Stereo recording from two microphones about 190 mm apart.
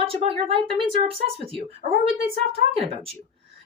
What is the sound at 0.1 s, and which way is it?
Speech, 30° right (ahead or behind).